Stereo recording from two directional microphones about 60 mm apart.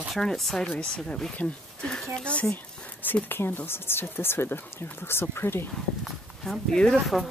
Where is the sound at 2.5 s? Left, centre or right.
Left.